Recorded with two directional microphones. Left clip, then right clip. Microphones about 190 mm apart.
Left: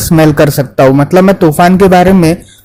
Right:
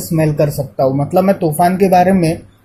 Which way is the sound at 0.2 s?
45° left (ahead or behind).